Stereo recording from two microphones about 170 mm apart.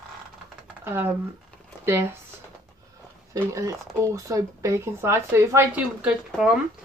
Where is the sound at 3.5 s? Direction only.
20° right (ahead or behind).